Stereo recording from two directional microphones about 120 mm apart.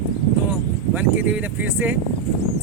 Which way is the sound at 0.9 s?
10° right (ahead or behind).